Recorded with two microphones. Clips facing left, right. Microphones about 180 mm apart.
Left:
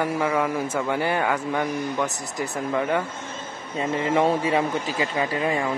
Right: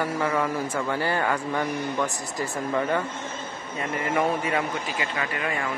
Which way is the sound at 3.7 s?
25° left (ahead or behind).